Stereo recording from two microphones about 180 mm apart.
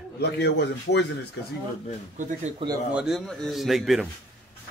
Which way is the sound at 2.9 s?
5° right (ahead or behind).